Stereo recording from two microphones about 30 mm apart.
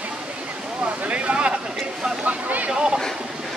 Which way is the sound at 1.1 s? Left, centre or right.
Right.